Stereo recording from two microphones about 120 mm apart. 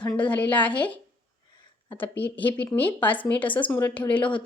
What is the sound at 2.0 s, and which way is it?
A woman's voice, 15° left (ahead or behind).